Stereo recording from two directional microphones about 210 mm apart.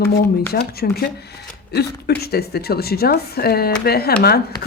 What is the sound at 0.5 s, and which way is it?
A woman's voice, 45° left (ahead or behind).